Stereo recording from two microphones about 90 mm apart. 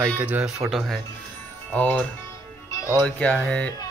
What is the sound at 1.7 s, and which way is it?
Music, 15° left (ahead or behind).